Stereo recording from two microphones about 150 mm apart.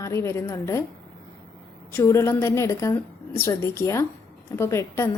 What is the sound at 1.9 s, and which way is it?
A woman's voice, 15° left (ahead or behind).